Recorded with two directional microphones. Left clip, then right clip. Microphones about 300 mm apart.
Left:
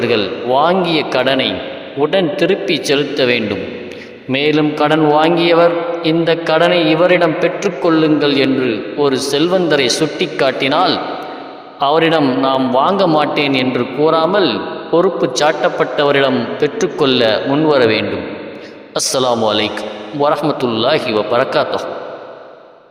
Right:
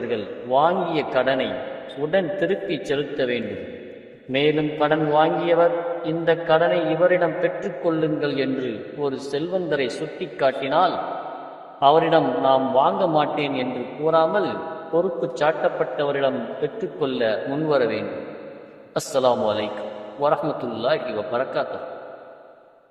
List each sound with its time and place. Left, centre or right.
0.1 s a man's voice: left